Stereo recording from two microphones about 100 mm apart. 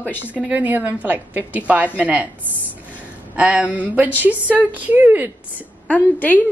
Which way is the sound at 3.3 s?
15° right (ahead or behind).